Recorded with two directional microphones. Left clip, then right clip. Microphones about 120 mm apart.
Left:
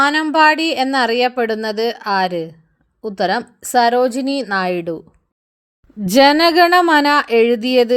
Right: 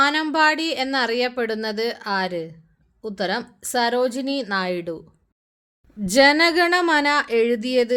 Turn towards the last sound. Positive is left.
turn(degrees=50)  # may be behind; listen again after turning